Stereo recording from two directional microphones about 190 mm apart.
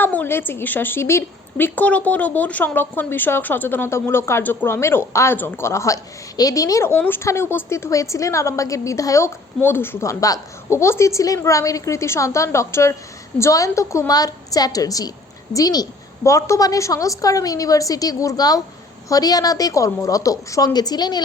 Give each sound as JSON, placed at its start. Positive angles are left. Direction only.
{"t": 0.0, "sound": "a woman's voice", "side_deg": 10}